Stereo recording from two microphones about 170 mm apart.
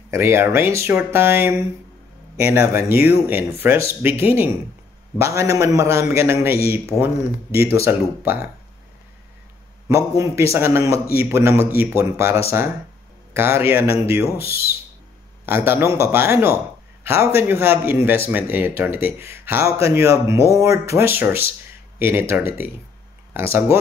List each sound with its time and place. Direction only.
0.1 s speech: 15° right (ahead or behind)
6.9 s speech: 10° left (ahead or behind)
7.8 s speech: 15° right (ahead or behind)
9.8 s speech: 15° right (ahead or behind)
14.3 s speech: 65° left (ahead or behind)
15.4 s speech: 15° right (ahead or behind)
21.9 s a sound: 15° right (ahead or behind)
22.3 s speech: 10° right (ahead or behind)